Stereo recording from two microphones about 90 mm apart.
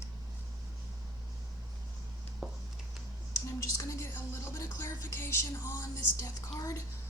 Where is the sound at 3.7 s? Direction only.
30° left (ahead or behind).